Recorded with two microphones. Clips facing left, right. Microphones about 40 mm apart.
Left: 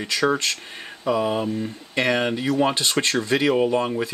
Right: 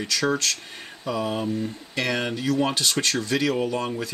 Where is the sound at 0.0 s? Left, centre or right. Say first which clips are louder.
Left 3 dB; centre.